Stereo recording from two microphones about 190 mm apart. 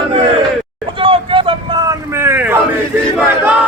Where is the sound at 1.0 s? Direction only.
30° right (ahead or behind).